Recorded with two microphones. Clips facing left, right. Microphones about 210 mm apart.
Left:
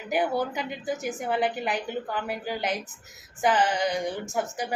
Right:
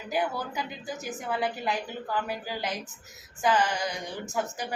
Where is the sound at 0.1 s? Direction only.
25° left (ahead or behind).